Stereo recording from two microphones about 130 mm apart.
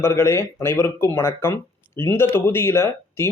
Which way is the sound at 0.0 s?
20° left (ahead or behind).